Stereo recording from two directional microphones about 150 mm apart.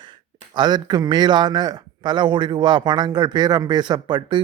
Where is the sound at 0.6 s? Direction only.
30° right (ahead or behind).